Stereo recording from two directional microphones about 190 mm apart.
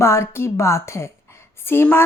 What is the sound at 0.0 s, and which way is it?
Speech, 15° left (ahead or behind).